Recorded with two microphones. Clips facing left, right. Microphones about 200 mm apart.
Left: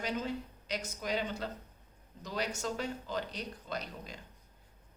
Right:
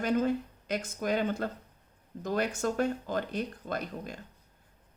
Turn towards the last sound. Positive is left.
turn(degrees=-50)  # may be behind; listen again after turning